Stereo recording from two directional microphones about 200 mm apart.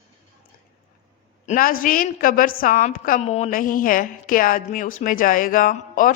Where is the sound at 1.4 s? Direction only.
45° left (ahead or behind).